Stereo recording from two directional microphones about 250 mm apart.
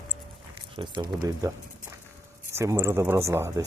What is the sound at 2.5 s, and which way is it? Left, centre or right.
Speech, centre.